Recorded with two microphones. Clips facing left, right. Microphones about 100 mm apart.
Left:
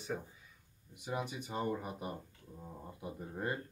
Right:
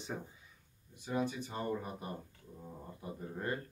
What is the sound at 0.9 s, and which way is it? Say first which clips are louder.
Speech: right 3 dB; 15° left (ahead or behind).